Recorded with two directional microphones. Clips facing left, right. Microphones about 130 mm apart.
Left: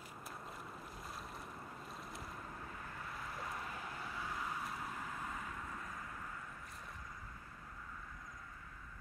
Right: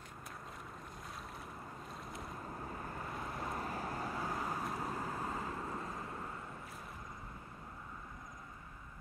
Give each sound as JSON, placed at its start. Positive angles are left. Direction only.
{"t": 2.0, "sound": "boat", "side_deg": 0}
{"t": 2.5, "sound": "vehicle", "side_deg": -35}